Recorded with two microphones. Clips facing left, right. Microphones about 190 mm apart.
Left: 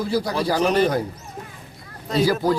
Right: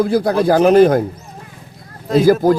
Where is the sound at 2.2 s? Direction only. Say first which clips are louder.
Right 7 dB; 50° right (ahead or behind).